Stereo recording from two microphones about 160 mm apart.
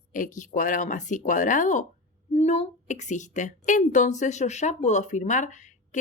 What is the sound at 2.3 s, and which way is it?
A woman's voice, 40° left (ahead or behind).